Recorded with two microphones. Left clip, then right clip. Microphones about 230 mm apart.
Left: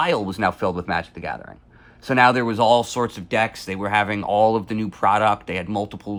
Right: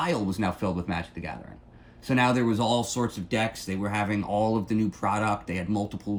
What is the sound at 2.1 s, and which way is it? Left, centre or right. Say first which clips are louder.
Speech: left 8 dB; centre.